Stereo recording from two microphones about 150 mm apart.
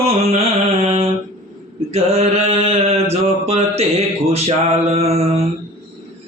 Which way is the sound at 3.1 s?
45° right (ahead or behind).